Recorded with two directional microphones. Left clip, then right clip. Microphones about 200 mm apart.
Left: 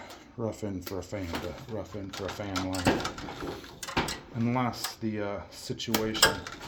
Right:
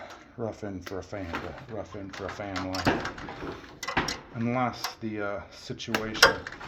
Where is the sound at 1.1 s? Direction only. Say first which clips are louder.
Left 1 dB; 80° left.